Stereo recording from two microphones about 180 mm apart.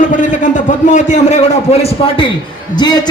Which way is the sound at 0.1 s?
45° left (ahead or behind).